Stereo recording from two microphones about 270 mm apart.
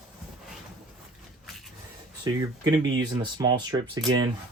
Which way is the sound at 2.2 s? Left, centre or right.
Centre.